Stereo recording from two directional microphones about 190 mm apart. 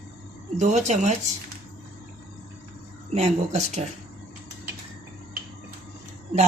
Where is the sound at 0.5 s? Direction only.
40° right (ahead or behind).